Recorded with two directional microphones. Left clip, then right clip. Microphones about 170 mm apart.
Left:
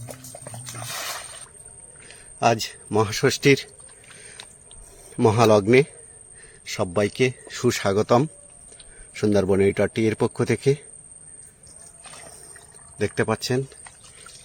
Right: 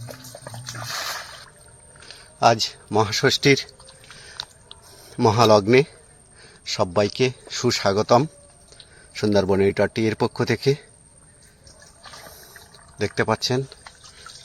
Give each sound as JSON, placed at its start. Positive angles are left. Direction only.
{"t": 0.1, "sound": "music", "side_deg": 0}
{"t": 2.4, "sound": "a man's voice", "side_deg": 10}
{"t": 4.3, "sound": "a sound", "side_deg": 15}
{"t": 6.7, "sound": "a man's voice", "side_deg": 10}
{"t": 7.6, "sound": "a man's voice", "side_deg": 20}
{"t": 13.0, "sound": "a man's voice", "side_deg": 10}